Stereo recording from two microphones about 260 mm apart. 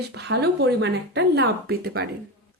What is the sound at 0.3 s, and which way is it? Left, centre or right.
A woman's voice, right.